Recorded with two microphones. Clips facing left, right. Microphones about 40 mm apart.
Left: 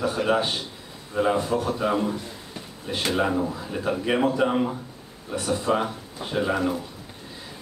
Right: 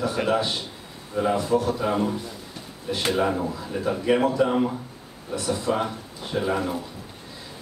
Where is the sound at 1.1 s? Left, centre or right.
Centre.